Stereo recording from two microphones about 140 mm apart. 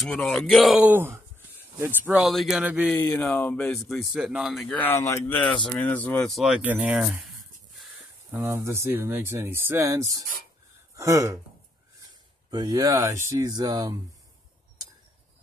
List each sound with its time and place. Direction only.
0.0 s speech: 5° left (ahead or behind)
0.8 s speech: 15° right (ahead or behind)
2.2 s speech: centre (ahead or behind)
2.9 s speech: 10° left (ahead or behind)
4.7 s speech: 15° left (ahead or behind); by 7.9 s centre (ahead or behind)
8.3 s speech: 20° right (ahead or behind)
12.4 s speech: 30° right (ahead or behind)